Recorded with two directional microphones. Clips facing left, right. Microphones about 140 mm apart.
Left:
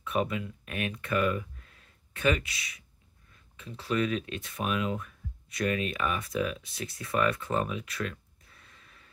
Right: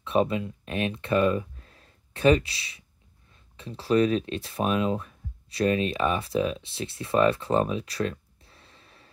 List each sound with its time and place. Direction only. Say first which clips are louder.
0.0 s speech: right 6 dB; 30° right (ahead or behind)